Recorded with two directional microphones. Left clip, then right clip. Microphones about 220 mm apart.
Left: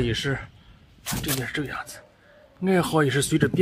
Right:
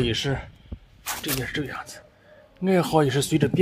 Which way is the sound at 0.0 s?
5° right (ahead or behind).